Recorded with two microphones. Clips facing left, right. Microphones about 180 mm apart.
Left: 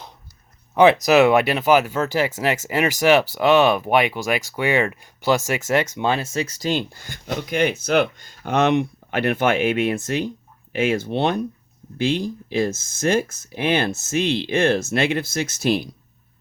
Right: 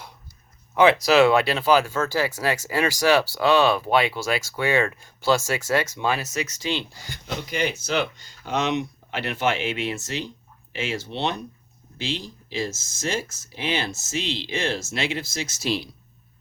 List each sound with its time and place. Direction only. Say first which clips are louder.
0.7 s speech: left 3 dB; 20° left (ahead or behind)
6.7 s speech: left 5 dB; 50° left (ahead or behind)